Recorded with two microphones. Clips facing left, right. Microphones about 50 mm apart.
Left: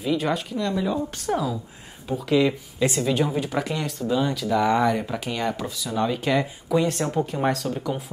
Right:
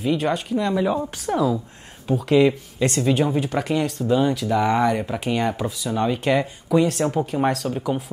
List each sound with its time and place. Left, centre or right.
0.0 s speech: centre
0.7 s speech: right
1.3 s speech: centre